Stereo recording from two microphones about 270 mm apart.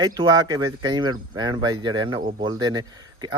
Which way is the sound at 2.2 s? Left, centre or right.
Right.